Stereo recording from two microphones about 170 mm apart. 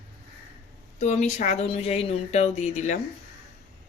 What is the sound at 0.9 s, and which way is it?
Speech, 40° left (ahead or behind).